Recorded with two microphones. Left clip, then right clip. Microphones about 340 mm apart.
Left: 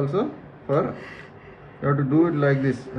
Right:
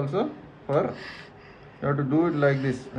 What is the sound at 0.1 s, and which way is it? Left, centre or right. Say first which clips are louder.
A man's voice: left 2 dB; right.